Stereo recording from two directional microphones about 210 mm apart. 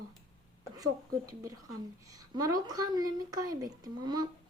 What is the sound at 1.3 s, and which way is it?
A woman's voice, 15° right (ahead or behind).